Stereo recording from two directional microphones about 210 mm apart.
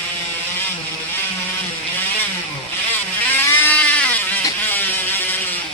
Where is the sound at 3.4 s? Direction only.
10° left (ahead or behind).